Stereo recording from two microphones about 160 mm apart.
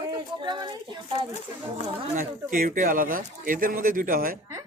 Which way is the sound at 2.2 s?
60° right (ahead or behind).